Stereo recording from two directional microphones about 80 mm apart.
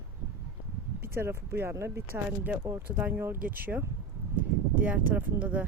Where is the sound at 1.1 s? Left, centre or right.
Right.